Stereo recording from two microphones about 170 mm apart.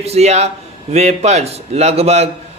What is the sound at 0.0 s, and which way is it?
A man's voice, 40° right (ahead or behind).